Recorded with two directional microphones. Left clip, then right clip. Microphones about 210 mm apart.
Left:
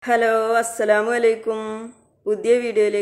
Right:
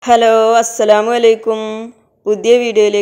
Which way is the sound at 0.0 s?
20° right (ahead or behind).